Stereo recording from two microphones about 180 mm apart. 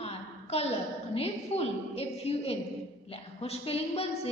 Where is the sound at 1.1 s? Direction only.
35° left (ahead or behind).